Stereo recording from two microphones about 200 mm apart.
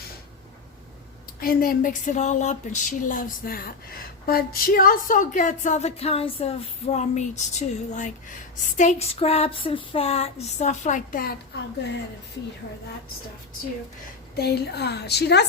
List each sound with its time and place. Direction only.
1.4 s speech: 45° left (ahead or behind)
14.3 s a woman's voice: 55° left (ahead or behind)